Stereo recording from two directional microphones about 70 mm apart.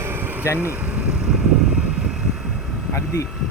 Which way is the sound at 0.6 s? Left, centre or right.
Right.